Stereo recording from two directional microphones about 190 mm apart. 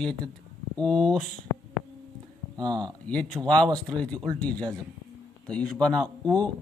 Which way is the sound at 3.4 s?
10° right (ahead or behind).